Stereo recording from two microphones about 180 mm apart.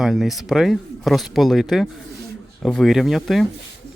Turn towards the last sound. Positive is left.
turn(degrees=0)  # may be behind; listen again after turning